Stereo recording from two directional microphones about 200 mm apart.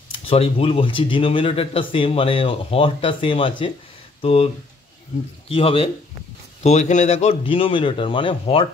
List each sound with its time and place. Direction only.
0.1 s speech: 30° left (ahead or behind)
5.5 s speech: 30° left (ahead or behind)